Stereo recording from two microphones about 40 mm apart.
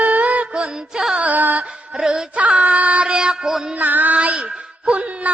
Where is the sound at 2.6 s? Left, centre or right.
Right.